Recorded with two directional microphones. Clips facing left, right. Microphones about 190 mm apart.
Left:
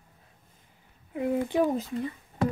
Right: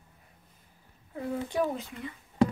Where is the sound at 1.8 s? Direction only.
40° left (ahead or behind).